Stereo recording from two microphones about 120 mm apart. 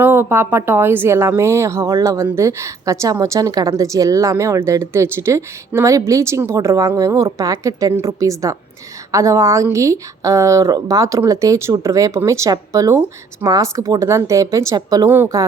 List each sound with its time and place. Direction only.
0.0 s a woman's voice: 20° right (ahead or behind)
15.1 s a woman's voice: 25° right (ahead or behind)